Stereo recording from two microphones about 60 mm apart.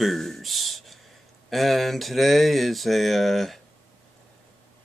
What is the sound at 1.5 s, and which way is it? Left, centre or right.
Speech, centre.